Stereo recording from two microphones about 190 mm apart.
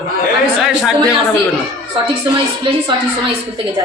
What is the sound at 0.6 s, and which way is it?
Speech, 5° right (ahead or behind).